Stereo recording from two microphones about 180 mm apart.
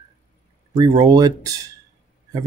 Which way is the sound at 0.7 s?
20° right (ahead or behind).